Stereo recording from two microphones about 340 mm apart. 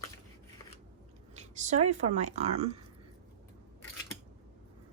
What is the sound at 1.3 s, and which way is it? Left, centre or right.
Speech, right.